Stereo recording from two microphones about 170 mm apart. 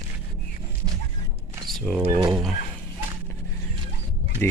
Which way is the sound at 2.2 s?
20° right (ahead or behind).